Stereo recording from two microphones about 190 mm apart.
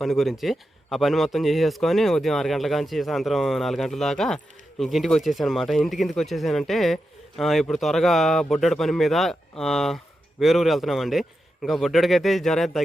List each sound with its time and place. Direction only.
0.0 s speech: centre (ahead or behind)